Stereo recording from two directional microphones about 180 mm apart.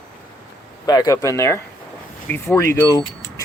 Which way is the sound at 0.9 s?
20° left (ahead or behind).